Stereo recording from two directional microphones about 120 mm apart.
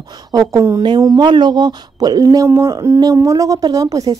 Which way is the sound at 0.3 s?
30° right (ahead or behind).